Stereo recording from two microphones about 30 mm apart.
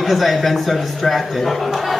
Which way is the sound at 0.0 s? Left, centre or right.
Centre.